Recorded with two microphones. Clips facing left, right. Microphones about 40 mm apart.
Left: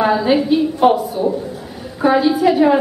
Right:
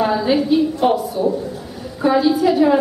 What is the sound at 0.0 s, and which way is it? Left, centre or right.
A woman's voice, left.